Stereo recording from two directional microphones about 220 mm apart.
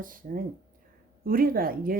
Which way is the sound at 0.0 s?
40° right (ahead or behind).